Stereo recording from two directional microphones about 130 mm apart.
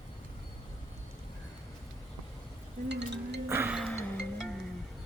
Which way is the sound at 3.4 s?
15° right (ahead or behind).